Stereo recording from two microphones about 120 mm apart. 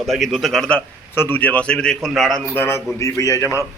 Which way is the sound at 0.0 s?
Centre (ahead or behind).